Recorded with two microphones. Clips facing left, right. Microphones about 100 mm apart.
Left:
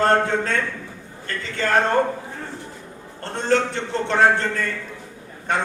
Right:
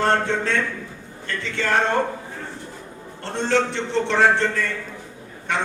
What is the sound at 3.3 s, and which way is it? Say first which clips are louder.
A man's voice: even; 45° left (ahead or behind).